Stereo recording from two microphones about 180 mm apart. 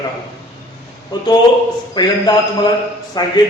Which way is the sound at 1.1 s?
20° left (ahead or behind).